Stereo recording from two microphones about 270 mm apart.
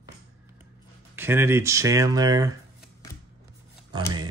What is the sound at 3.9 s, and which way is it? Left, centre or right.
Speech, centre.